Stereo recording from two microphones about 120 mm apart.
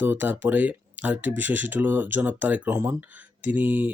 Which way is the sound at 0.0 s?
15° right (ahead or behind).